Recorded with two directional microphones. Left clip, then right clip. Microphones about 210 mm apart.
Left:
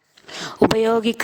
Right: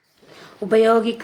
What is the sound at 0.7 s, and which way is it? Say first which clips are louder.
Speech: right 3 dB; 50° left (ahead or behind).